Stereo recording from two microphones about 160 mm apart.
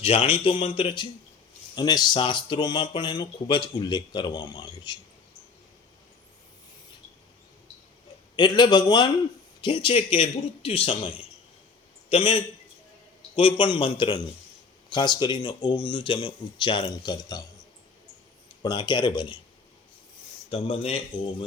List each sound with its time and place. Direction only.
0.0 s a man's voice: 35° left (ahead or behind)
8.4 s a man's voice: 25° left (ahead or behind)
18.6 s speech: 30° left (ahead or behind)
20.5 s a man's voice: 35° left (ahead or behind)